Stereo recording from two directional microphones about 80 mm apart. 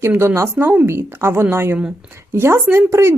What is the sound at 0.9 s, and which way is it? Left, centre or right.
Speech, right.